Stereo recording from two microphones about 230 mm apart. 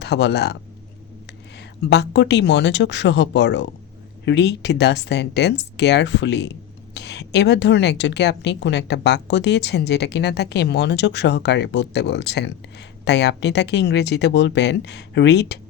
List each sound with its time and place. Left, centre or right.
0.0 s speech: left